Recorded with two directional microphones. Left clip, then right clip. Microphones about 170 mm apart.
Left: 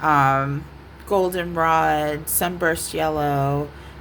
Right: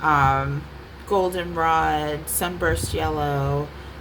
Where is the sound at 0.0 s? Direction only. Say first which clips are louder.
Left 1 dB; 35° left (ahead or behind).